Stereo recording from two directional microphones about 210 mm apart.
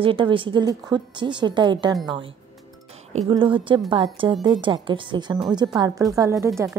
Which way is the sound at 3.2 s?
25° right (ahead or behind).